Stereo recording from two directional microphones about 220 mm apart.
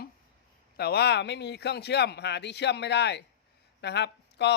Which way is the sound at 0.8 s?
45° left (ahead or behind).